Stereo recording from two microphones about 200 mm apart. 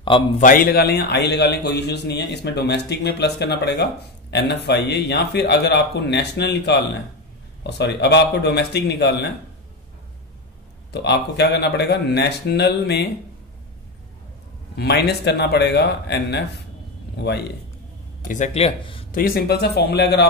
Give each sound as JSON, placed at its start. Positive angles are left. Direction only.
{"t": 0.4, "sound": "a man's voice", "side_deg": 45}
{"t": 10.9, "sound": "a man's voice", "side_deg": 60}
{"t": 14.8, "sound": "a man's voice", "side_deg": 55}
{"t": 18.3, "sound": "speech", "side_deg": 35}
{"t": 19.1, "sound": "a man's voice", "side_deg": 50}